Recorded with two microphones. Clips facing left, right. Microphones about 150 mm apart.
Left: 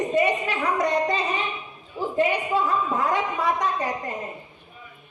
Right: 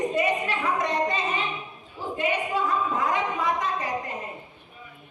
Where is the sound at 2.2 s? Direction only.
40° left (ahead or behind).